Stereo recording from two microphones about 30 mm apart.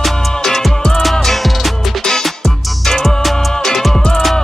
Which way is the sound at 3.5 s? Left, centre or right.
Centre.